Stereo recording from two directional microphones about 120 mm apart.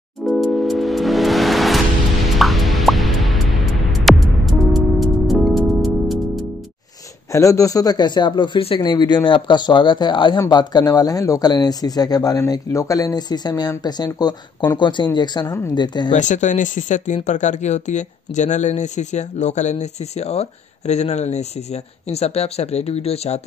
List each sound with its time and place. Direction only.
0.2 s music: centre (ahead or behind)
7.3 s speech: 25° left (ahead or behind)
15.4 s speech: 25° left (ahead or behind)
15.7 s speech: 35° left (ahead or behind)
16.1 s speech: 90° left; by 23.4 s 60° left (ahead or behind)